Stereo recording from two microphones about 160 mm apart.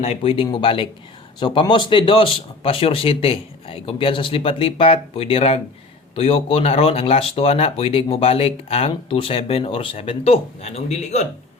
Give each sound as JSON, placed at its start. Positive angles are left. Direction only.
{"t": 0.0, "sound": "speech", "side_deg": 40}